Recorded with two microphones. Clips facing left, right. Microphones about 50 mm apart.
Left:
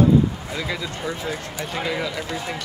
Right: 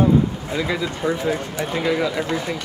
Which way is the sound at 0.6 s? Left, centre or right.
Centre.